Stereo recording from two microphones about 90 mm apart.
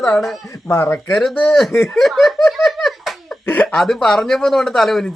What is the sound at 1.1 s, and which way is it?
Speech, centre (ahead or behind).